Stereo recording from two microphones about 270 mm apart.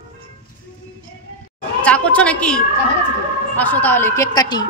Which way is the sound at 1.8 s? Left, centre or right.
Centre.